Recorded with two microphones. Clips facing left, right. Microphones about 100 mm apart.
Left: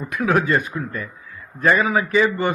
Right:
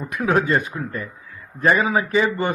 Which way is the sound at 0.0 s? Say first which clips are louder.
Even; 30° right (ahead or behind).